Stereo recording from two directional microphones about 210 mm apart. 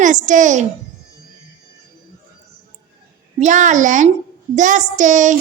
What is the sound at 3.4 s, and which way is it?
A child's voice, 35° right (ahead or behind).